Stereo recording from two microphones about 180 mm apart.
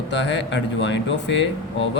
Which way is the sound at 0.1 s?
75° left (ahead or behind).